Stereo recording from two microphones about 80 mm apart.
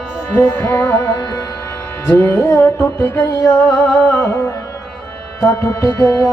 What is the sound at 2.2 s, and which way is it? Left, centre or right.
Music, left.